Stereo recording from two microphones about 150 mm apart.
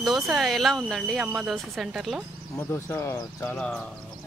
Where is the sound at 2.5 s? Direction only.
15° left (ahead or behind).